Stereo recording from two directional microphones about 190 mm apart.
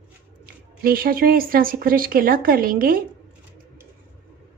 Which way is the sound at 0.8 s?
50° right (ahead or behind).